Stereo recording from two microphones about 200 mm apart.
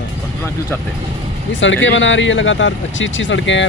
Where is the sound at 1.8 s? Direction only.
70° left (ahead or behind).